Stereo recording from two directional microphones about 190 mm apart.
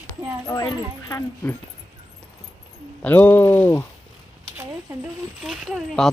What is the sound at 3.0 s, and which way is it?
Speech, 10° left (ahead or behind).